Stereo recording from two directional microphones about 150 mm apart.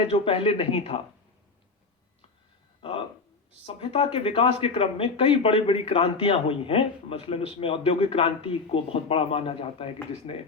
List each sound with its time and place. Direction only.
0.0 s speech: 35° left (ahead or behind)
3.7 s speech: 35° left (ahead or behind)